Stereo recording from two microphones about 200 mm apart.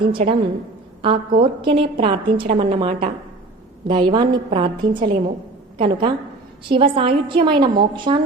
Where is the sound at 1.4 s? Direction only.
25° right (ahead or behind).